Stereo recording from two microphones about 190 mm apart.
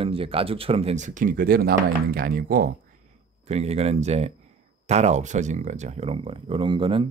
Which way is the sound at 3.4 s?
35° right (ahead or behind).